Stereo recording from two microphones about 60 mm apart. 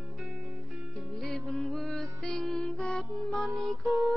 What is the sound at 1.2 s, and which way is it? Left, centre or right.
Music, centre.